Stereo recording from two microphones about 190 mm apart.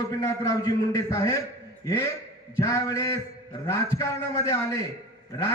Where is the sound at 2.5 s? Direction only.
15° left (ahead or behind).